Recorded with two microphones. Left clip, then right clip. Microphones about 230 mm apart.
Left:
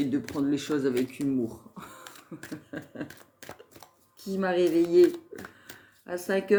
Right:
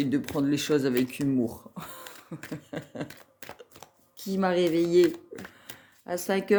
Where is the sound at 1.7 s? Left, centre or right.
Right.